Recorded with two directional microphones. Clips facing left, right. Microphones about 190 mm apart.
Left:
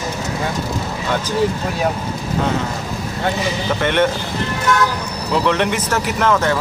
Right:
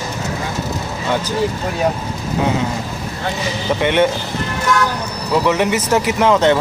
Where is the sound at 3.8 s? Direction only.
15° right (ahead or behind).